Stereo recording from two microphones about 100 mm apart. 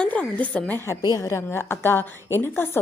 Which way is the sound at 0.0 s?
15° left (ahead or behind).